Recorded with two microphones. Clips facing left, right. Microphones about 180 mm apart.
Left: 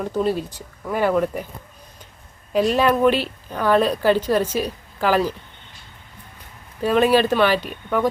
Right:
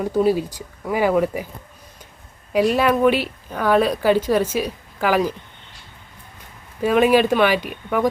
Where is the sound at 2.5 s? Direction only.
10° right (ahead or behind).